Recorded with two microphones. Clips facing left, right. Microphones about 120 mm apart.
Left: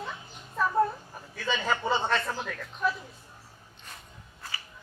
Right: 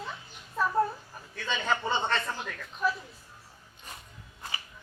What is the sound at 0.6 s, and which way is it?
A man's voice, centre (ahead or behind).